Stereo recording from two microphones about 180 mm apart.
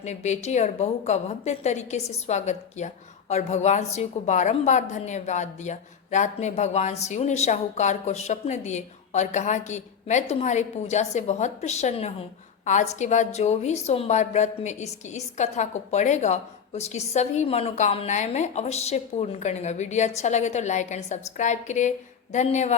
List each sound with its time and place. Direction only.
0.0 s a woman's voice: 40° left (ahead or behind)